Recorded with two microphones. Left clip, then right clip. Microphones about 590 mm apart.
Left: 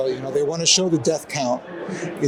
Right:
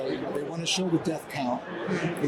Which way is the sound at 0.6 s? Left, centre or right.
Left.